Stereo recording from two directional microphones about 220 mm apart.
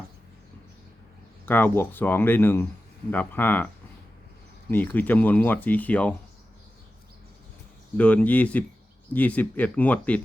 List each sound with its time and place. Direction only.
1.5 s speech: 10° left (ahead or behind)
4.7 s speech: 10° left (ahead or behind)
7.9 s speech: 5° left (ahead or behind)